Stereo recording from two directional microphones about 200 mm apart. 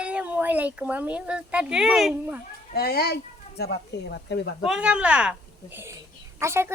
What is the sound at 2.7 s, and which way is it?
Speech, 50° left (ahead or behind).